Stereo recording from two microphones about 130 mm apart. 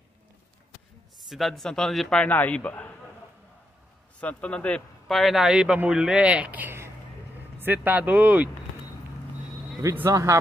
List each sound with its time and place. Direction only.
1.3 s speech: centre (ahead or behind)
4.2 s speech: 10° left (ahead or behind); by 8.5 s 10° right (ahead or behind)
9.8 s speech: 25° right (ahead or behind)